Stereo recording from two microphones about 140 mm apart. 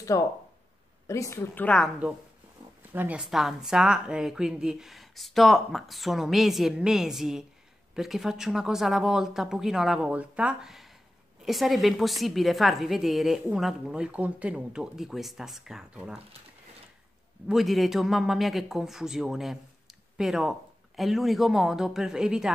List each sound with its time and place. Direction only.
0.1 s a woman's voice: 20° left (ahead or behind)
2.9 s speech: 10° right (ahead or behind)
17.5 s speech: centre (ahead or behind)